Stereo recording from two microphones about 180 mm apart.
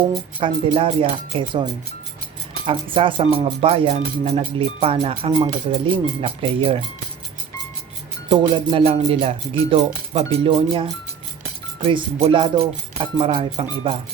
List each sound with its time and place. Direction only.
0.3 s speech: 30° right (ahead or behind)
2.6 s speech: 30° right (ahead or behind)
8.3 s speech: 30° right (ahead or behind)